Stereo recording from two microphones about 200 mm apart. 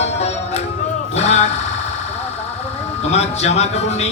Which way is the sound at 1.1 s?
30° left (ahead or behind).